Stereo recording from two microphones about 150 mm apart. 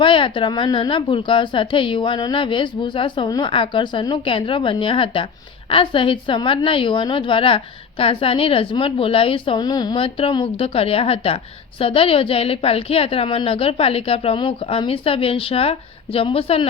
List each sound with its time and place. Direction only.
0.0 s a woman's voice: 35° left (ahead or behind)